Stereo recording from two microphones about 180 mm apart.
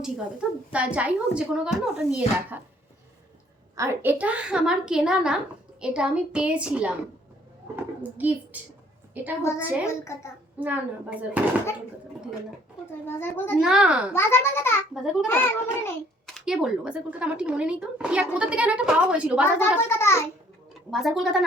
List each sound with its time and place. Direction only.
0.0 s a woman's voice: 5° right (ahead or behind)
3.8 s a child's voice: 10° right (ahead or behind)
8.5 s a woman's voice: 10° right (ahead or behind)
9.8 s a child's voice: 15° left (ahead or behind)
10.6 s a woman's voice: 10° right (ahead or behind)
13.1 s a child's voice: 10° left (ahead or behind)
13.6 s a child's voice: 5° right (ahead or behind)
14.1 s a child's voice: 15° left (ahead or behind)
14.9 s a child's voice: centre (ahead or behind)
15.3 s a child's voice: 10° left (ahead or behind); by 19.5 s 5° right (ahead or behind)
19.5 s a child's voice: 15° left (ahead or behind)
20.9 s a child's voice: centre (ahead or behind)